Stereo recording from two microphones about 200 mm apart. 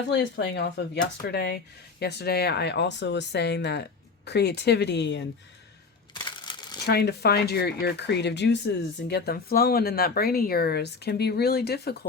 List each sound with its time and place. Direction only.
0.1 s speech: 65° left (ahead or behind)
6.8 s speech: 55° left (ahead or behind)